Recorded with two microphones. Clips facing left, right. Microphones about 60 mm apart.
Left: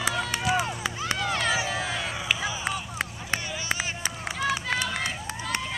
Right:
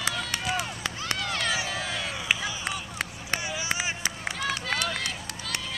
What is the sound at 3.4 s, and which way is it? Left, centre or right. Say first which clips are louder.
Run: even; centre.